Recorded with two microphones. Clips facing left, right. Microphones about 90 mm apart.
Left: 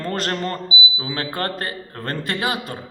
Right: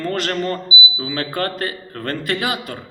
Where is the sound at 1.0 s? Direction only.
30° left (ahead or behind).